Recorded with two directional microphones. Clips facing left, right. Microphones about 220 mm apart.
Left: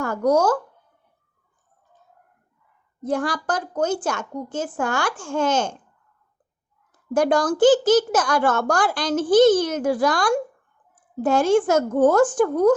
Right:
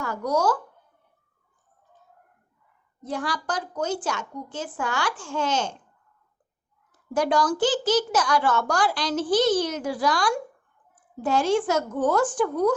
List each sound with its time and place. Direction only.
0.0 s speech: 50° left (ahead or behind)
3.0 s a child's voice: 50° left (ahead or behind)
7.1 s a child's voice: 50° left (ahead or behind)